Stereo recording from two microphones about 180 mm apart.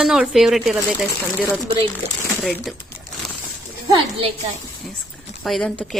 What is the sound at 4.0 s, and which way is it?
Speech, 30° right (ahead or behind).